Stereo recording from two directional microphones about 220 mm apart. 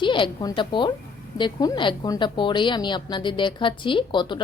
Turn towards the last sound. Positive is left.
turn(degrees=20)  # may be behind; listen again after turning